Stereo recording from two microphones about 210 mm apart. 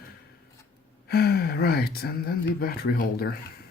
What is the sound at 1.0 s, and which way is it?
Speech, 50° left (ahead or behind).